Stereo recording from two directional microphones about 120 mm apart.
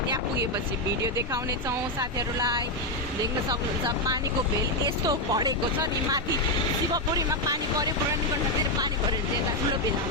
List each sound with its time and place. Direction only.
1.0 s speech: 25° right (ahead or behind)